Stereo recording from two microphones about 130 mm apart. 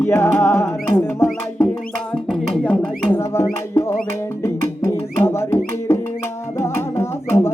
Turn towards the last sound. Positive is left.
turn(degrees=20)  # may be behind; listen again after turning